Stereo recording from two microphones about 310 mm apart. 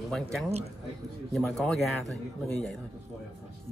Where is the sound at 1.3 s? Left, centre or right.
Centre.